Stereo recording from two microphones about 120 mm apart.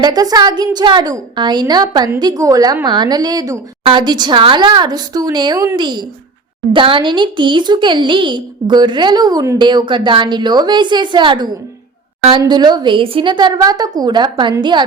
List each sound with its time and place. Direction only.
0.0 s a woman's voice: 35° right (ahead or behind)